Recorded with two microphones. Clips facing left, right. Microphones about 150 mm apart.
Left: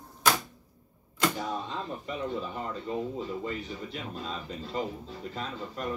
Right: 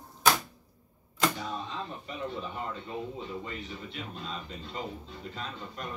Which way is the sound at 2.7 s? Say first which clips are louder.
Left 5 dB; 40° left (ahead or behind).